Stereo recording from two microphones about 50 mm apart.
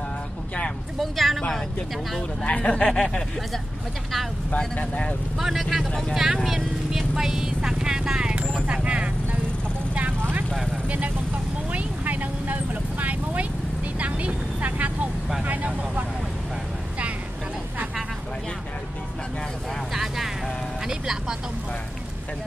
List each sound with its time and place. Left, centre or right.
0.9 s a sound: centre
2.4 s speech: left
2.7 s snicker: centre
4.7 s speech: left
5.4 s speech: centre
8.6 s vehicle: right
11.7 s vehicle: right
13.9 s speech: right
19.9 s vehicle: centre
20.8 s speech: centre